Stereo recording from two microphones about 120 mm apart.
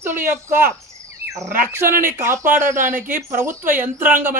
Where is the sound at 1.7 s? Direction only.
20° right (ahead or behind).